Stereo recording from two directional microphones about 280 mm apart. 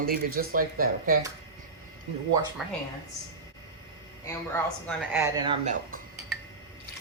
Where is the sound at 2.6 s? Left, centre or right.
Centre.